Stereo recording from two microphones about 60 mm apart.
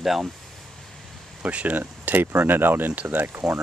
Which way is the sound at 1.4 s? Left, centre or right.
Right.